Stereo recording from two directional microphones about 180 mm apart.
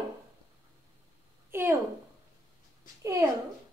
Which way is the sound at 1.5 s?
10° right (ahead or behind).